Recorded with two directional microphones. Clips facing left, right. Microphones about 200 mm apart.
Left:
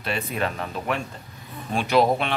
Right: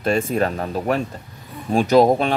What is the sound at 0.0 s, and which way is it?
Speech, 45° right (ahead or behind).